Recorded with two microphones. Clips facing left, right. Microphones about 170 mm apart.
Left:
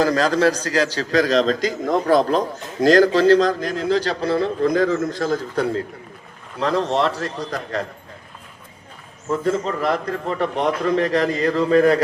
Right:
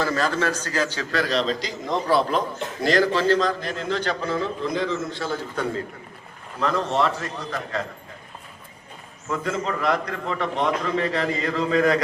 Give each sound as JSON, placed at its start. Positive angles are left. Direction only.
{"t": 0.0, "sound": "a man's voice", "side_deg": 40}
{"t": 9.3, "sound": "a man's voice", "side_deg": 35}
{"t": 10.2, "sound": "a man's voice", "side_deg": 40}
{"t": 11.6, "sound": "speech", "side_deg": 50}